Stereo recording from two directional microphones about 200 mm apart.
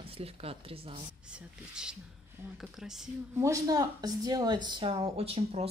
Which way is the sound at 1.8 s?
5° right (ahead or behind).